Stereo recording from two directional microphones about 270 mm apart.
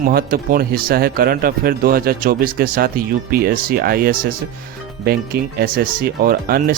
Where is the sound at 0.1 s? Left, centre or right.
Right.